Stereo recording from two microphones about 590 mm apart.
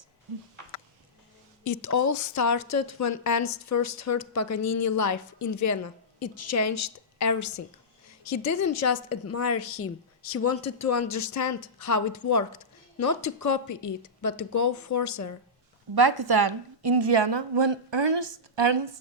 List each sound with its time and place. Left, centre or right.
1.6 s a woman's voice: left
16.0 s a woman's voice: right